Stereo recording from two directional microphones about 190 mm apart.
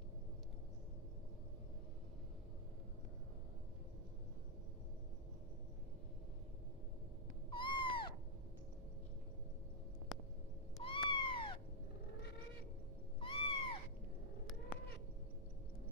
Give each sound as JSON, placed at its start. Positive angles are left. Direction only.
{"t": 7.5, "sound": "owl", "side_deg": 25}
{"t": 10.8, "sound": "cat", "side_deg": 25}
{"t": 13.2, "sound": "cat", "side_deg": 30}